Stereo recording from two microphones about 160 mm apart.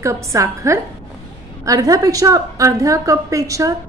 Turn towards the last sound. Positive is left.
turn(degrees=-20)  # may be behind; listen again after turning